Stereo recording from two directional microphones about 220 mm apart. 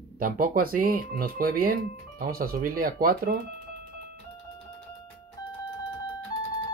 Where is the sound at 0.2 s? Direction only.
40° right (ahead or behind).